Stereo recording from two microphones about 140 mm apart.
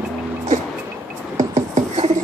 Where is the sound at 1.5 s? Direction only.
60° right (ahead or behind).